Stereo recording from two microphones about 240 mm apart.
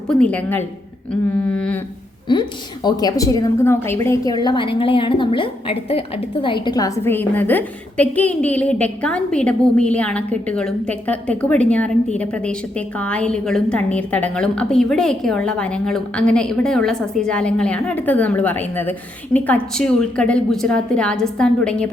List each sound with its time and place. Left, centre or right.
0.1 s a woman's voice: centre
2.3 s a woman's voice: centre